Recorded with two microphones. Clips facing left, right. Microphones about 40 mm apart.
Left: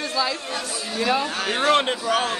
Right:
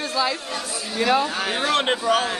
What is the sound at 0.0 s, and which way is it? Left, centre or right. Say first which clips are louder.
Chatter: right 1 dB; right.